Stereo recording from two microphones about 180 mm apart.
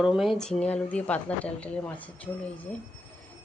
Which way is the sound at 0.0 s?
Centre (ahead or behind).